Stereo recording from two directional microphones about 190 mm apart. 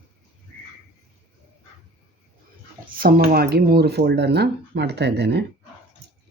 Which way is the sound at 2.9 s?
50° right (ahead or behind).